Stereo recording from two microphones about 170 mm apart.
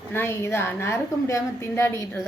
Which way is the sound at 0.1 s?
15° left (ahead or behind).